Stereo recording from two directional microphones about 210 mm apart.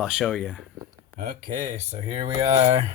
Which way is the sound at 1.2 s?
45° right (ahead or behind).